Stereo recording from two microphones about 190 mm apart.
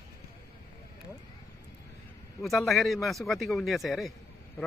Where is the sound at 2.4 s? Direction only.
Centre (ahead or behind).